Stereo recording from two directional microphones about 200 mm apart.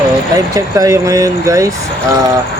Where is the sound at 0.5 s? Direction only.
15° right (ahead or behind).